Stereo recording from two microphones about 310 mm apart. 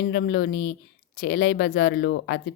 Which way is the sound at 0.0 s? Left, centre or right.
Left.